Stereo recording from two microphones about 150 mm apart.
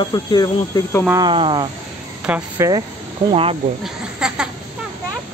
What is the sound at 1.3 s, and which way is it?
Speech, 35° right (ahead or behind).